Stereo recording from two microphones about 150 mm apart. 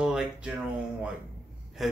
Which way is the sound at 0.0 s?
5° right (ahead or behind).